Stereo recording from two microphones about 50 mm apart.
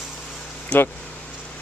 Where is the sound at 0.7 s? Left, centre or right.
Left.